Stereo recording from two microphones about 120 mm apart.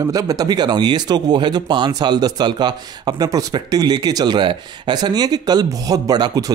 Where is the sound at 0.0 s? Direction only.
30° right (ahead or behind).